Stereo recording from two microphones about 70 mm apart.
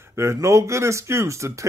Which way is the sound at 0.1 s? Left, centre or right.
Right.